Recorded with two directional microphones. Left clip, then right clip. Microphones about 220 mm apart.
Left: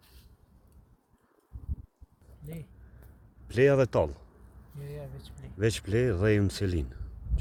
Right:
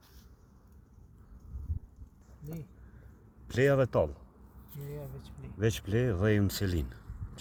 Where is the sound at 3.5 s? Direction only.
20° left (ahead or behind).